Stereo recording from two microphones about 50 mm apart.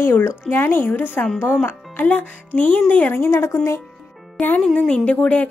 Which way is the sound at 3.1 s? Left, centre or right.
Left.